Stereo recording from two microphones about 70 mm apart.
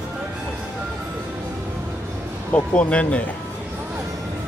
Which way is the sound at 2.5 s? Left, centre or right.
Centre.